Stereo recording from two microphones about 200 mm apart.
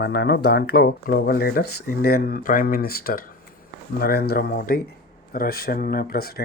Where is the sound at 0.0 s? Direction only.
55° left (ahead or behind).